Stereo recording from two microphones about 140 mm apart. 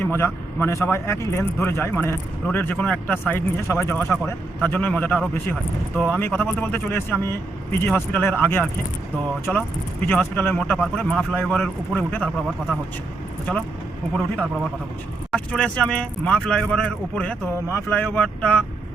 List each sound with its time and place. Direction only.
0.0 s a man's voice: 15° left (ahead or behind)
10.1 s a man's voice: 15° left (ahead or behind)
15.3 s a man's voice: 5° left (ahead or behind)